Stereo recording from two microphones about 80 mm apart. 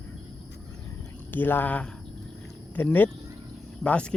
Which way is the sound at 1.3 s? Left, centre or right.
Left.